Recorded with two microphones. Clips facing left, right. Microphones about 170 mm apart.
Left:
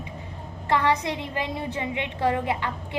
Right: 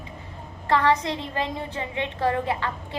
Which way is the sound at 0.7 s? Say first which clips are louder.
Right 2 dB; 20° left (ahead or behind).